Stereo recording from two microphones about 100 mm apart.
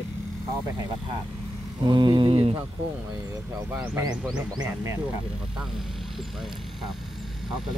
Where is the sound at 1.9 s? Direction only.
55° right (ahead or behind).